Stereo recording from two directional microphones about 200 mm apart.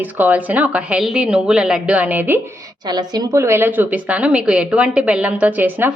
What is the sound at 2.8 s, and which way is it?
A woman's voice, 20° right (ahead or behind).